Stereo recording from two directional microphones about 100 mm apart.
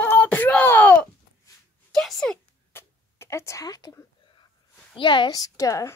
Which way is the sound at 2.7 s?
25° left (ahead or behind).